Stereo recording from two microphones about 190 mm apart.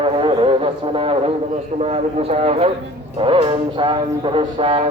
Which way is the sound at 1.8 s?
35° right (ahead or behind).